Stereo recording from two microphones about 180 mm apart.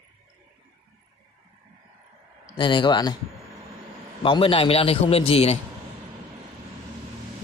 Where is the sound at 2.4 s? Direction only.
25° left (ahead or behind).